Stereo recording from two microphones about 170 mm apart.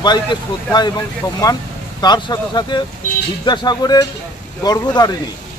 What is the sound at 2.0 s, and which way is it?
Speech, 25° left (ahead or behind).